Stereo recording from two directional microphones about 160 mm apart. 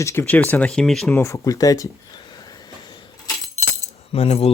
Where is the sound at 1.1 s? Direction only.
20° left (ahead or behind).